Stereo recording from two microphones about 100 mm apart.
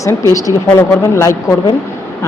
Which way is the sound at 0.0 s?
30° left (ahead or behind).